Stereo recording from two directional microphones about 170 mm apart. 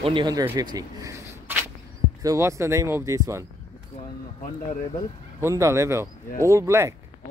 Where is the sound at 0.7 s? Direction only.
15° right (ahead or behind).